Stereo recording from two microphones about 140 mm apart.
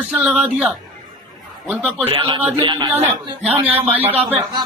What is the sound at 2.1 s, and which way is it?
Speech, 35° right (ahead or behind).